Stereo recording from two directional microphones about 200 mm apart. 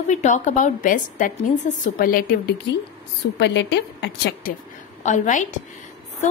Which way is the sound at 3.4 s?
60° left (ahead or behind).